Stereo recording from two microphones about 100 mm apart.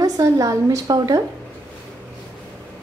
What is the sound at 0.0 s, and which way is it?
A woman's voice, 30° right (ahead or behind).